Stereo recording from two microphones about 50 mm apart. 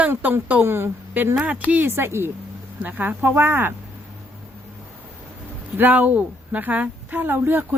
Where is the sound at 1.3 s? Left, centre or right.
Right.